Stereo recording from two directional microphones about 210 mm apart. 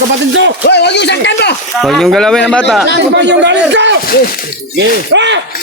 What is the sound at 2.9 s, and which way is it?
Speech, 55° right (ahead or behind).